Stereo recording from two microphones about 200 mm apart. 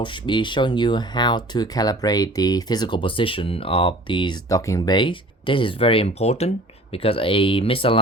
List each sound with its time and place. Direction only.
0.0 s speech: 25° left (ahead or behind)